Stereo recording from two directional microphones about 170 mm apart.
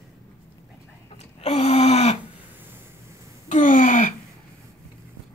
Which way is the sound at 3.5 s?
50° left (ahead or behind).